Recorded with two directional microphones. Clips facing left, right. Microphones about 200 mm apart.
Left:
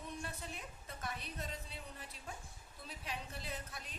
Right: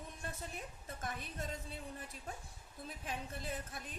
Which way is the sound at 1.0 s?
50° right (ahead or behind).